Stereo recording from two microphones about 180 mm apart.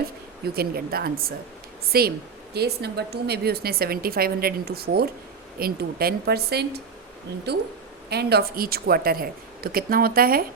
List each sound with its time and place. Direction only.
0.4 s a woman's voice: 60° right (ahead or behind)